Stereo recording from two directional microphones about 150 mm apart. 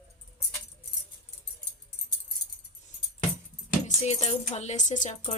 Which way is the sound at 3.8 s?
50° left (ahead or behind).